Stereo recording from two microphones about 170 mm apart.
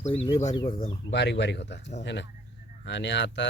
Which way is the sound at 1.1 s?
85° left.